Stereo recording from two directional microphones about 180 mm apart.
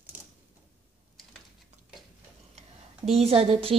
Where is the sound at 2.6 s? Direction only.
35° right (ahead or behind).